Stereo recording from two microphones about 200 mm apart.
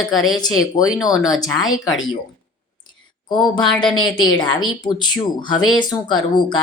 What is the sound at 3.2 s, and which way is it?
Speech, 20° left (ahead or behind).